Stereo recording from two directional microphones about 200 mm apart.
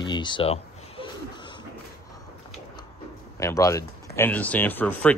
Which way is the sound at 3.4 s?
15° left (ahead or behind).